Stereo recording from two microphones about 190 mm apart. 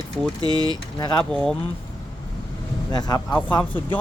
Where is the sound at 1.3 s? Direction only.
5° left (ahead or behind).